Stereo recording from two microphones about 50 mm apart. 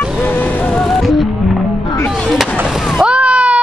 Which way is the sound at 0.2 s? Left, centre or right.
Left.